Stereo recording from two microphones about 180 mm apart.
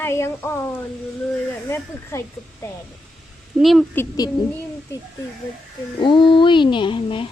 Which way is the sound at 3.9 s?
15° left (ahead or behind).